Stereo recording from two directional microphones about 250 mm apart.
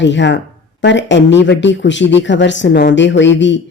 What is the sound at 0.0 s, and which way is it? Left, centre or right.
Speech, left.